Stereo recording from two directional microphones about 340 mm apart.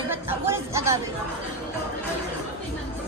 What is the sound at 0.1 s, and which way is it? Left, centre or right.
Music, centre.